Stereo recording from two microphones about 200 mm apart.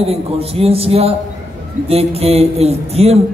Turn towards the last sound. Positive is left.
turn(degrees=-30)  # may be behind; listen again after turning